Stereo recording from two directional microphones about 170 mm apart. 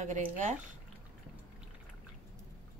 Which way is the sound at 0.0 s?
45° right (ahead or behind).